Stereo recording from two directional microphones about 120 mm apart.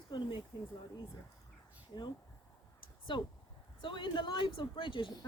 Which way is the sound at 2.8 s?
45° left (ahead or behind).